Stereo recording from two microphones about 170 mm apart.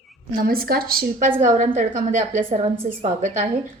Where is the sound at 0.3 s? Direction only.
60° right (ahead or behind).